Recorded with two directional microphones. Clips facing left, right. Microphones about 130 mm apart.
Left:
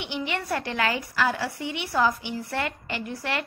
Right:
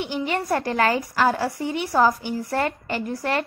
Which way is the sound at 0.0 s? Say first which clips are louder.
Right 5 dB; 40° right (ahead or behind).